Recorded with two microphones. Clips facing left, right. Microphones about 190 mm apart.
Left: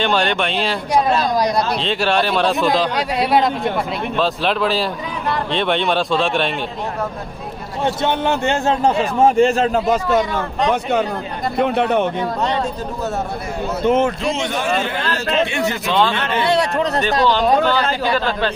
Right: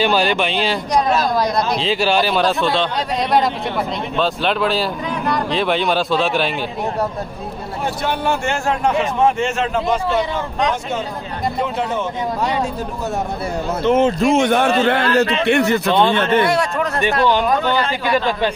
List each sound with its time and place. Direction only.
0.0 s speech: 5° right (ahead or behind)
7.8 s a man's voice: 20° left (ahead or behind)
10.1 s speech: 60° left (ahead or behind)
13.9 s a man's voice: 10° left (ahead or behind)
14.2 s speech: 50° right (ahead or behind)